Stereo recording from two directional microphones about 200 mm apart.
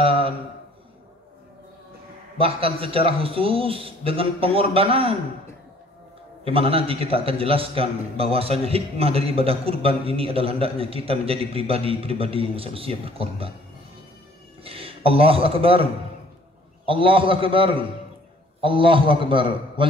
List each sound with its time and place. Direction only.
0.0 s a sound: 25° right (ahead or behind)
2.3 s a man's voice: 30° right (ahead or behind)
6.4 s a man's voice: 30° right (ahead or behind)
14.6 s a man's voice: 30° right (ahead or behind)